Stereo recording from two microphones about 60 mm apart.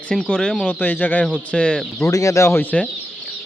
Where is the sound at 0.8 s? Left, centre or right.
Left.